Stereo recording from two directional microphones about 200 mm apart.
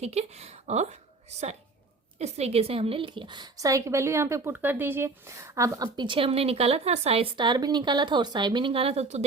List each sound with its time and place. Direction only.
0.0 s speech: 30° right (ahead or behind)
2.1 s a woman's voice: 30° right (ahead or behind)